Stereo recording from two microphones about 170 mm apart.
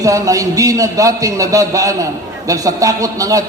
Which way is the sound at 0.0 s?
20° right (ahead or behind).